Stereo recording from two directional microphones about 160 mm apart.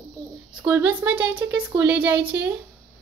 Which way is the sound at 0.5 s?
10° right (ahead or behind).